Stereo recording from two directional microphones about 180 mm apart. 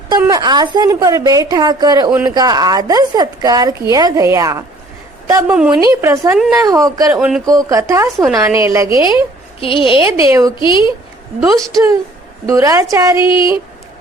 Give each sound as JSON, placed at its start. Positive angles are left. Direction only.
{"t": 0.2, "sound": "a woman's voice", "side_deg": -20}
{"t": 5.5, "sound": "speech", "side_deg": -5}
{"t": 5.8, "sound": "a woman's voice", "side_deg": -15}
{"t": 7.1, "sound": "speech", "side_deg": -5}
{"t": 7.4, "sound": "a woman's voice", "side_deg": -20}
{"t": 9.6, "sound": "a woman's voice", "side_deg": 30}
{"t": 10.0, "sound": "a woman's voice", "side_deg": -15}
{"t": 10.6, "sound": "a woman's voice", "side_deg": 25}
{"t": 11.5, "sound": "speech", "side_deg": 0}
{"t": 12.5, "sound": "a woman's voice", "side_deg": -20}